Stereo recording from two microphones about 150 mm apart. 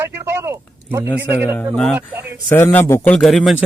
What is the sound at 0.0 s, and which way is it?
Speech, 15° right (ahead or behind).